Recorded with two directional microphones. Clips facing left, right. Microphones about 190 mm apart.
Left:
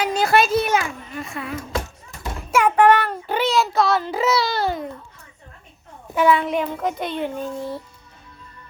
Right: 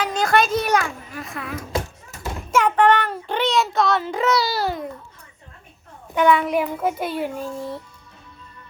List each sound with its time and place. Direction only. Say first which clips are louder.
0.0 s a child's voice: left 1 dB; 10° left (ahead or behind)
2.5 s child singing: left 2 dB; 10° left (ahead or behind)
3.2 s a child's voice: left 1 dB; 5° left (ahead or behind)
6.1 s a child's voice: even; centre (ahead or behind)